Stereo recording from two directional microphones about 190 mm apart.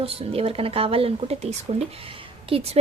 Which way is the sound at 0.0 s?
30° right (ahead or behind).